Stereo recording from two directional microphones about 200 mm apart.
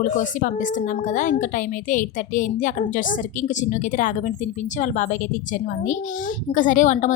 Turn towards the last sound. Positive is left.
turn(degrees=40)  # may be behind; listen again after turning